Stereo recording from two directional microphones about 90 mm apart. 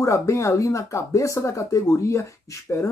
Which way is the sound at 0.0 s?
35° left (ahead or behind).